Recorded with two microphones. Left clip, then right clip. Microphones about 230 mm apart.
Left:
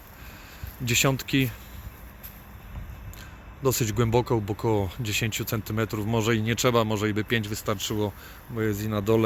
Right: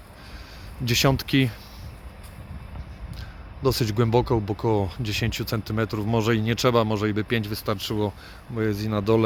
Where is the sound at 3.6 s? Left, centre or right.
Centre.